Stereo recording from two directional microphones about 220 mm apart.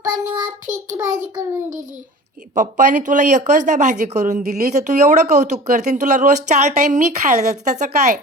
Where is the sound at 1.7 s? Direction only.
35° right (ahead or behind).